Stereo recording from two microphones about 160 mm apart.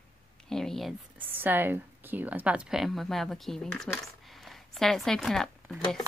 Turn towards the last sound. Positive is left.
turn(degrees=5)  # may be behind; listen again after turning